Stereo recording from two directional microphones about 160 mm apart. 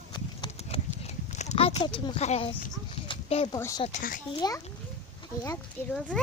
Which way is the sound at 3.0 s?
35° left (ahead or behind).